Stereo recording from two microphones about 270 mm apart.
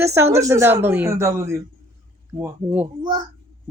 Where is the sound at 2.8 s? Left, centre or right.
Centre.